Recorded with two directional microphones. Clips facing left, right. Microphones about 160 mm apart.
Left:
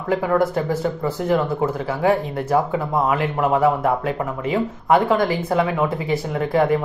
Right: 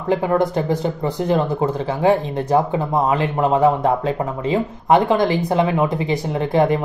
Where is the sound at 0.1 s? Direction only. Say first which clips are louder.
Right 1 dB; 20° right (ahead or behind).